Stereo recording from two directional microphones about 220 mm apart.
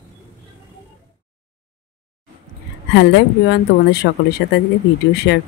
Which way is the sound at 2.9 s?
50° left (ahead or behind).